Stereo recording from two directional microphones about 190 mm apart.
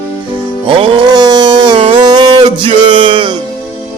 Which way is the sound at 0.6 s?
25° right (ahead or behind).